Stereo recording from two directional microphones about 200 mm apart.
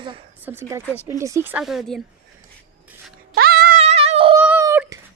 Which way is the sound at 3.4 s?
50° right (ahead or behind).